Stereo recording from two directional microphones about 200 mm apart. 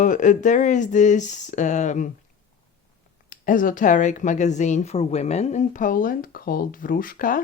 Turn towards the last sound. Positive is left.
turn(degrees=45)  # may be behind; listen again after turning